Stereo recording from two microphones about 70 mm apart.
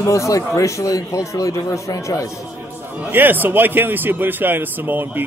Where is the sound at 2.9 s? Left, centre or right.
Right.